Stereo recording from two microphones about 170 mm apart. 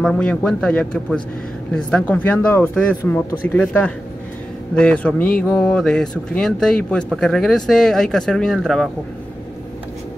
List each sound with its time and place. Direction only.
0.0 s speech: 5° left (ahead or behind)